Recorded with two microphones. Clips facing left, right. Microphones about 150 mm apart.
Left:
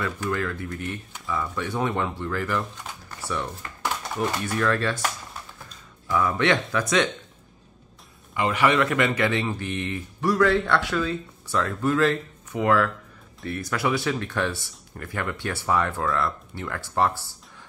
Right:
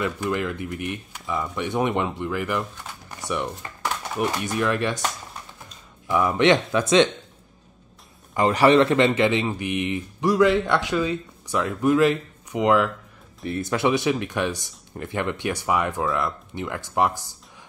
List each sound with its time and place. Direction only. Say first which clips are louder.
0.0 s speech: right 2 dB; 15° right (ahead or behind)
6.0 s speech: right 4 dB; 20° right (ahead or behind)
8.4 s speech: right 5 dB; 35° right (ahead or behind); by 17.4 s 15° right (ahead or behind)